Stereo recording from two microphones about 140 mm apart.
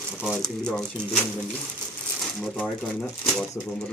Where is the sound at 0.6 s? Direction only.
5° left (ahead or behind).